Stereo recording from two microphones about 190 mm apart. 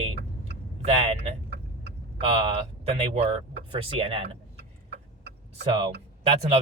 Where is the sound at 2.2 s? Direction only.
30° right (ahead or behind).